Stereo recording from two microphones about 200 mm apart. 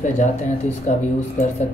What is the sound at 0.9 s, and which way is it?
Speech, 40° left (ahead or behind).